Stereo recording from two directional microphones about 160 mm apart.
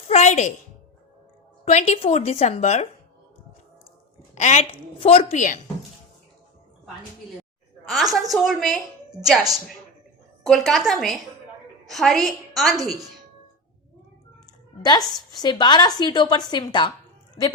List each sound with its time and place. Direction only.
0.1 s a sound: 45° left (ahead or behind)
1.6 s a woman's voice: 45° left (ahead or behind)
4.4 s a woman's voice: 45° left (ahead or behind)
7.9 s a woman's voice: centre (ahead or behind)
10.4 s a woman's voice: centre (ahead or behind)
14.8 s a woman's voice: 25° left (ahead or behind)